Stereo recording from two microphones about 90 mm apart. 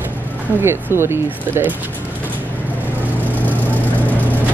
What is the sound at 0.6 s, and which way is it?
Speech, 30° right (ahead or behind).